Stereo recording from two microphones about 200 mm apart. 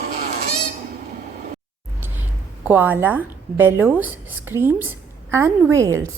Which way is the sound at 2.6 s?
10° right (ahead or behind).